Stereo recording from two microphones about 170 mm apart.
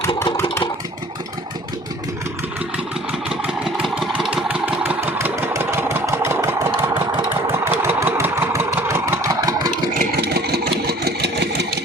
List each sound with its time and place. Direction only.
2.7 s engine: 5° right (ahead or behind)
6.9 s engine: 30° right (ahead or behind)
7.5 s engine: 15° right (ahead or behind)
10.0 s engine: 70° right (ahead or behind)